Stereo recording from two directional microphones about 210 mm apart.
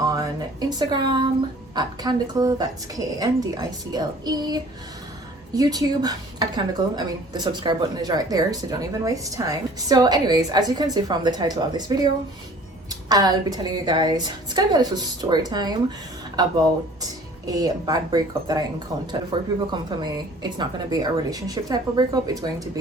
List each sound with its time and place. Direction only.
0.0 s a woman's voice: 15° right (ahead or behind)
17.0 s speech: 15° right (ahead or behind)